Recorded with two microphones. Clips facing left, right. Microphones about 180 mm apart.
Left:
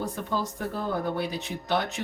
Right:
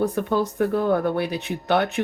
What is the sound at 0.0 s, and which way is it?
Speech, 65° right (ahead or behind).